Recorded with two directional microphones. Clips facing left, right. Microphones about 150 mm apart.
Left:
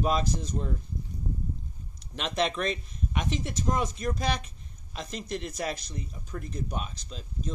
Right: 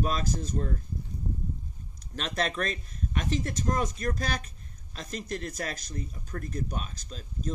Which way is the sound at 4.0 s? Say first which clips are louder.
Left 2 dB; 10° left (ahead or behind).